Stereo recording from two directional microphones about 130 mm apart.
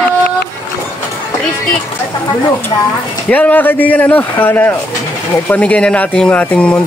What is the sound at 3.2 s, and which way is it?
Speech, 10° left (ahead or behind).